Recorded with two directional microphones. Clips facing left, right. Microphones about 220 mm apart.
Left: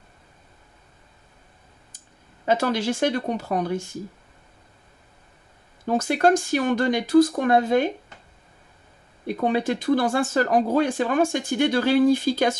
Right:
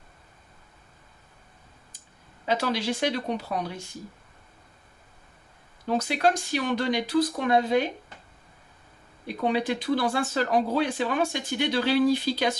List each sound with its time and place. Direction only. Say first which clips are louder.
2.4 s speech: left 4 dB; 50° left (ahead or behind)
5.9 s speech: left 5 dB; 50° left (ahead or behind)
9.2 s speech: left 3 dB; 45° left (ahead or behind)